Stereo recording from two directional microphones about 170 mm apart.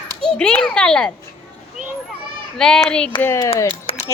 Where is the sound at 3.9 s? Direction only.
30° left (ahead or behind).